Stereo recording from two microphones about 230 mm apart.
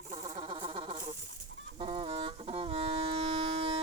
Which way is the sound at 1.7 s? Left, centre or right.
Right.